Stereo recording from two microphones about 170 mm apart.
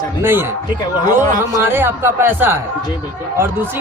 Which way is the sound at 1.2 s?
20° left (ahead or behind).